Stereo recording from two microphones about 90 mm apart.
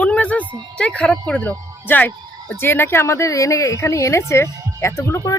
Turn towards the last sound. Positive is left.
turn(degrees=30)  # may be behind; listen again after turning